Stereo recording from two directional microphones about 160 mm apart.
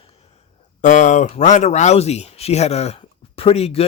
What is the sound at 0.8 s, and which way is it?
Speech, 50° left (ahead or behind).